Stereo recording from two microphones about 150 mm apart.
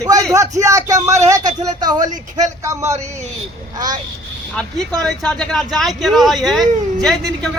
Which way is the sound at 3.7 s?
25° right (ahead or behind).